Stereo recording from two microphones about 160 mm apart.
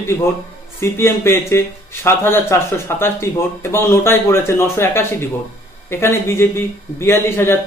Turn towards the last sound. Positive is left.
turn(degrees=15)  # may be behind; listen again after turning